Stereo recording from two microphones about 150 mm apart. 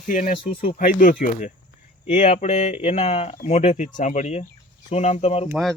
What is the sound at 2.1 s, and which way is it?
Speech, 45° left (ahead or behind).